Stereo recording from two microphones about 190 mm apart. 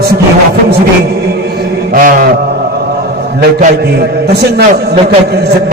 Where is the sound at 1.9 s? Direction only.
45° right (ahead or behind).